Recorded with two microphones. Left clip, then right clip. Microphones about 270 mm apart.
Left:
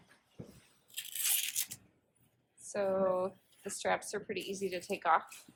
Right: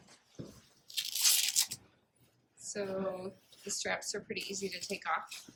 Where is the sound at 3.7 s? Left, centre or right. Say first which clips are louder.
Left 2 dB; centre.